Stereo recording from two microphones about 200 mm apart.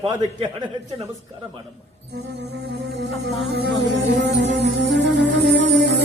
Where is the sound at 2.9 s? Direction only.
60° right (ahead or behind).